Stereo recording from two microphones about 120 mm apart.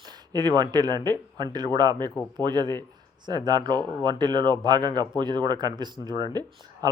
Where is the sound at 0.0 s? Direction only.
35° right (ahead or behind).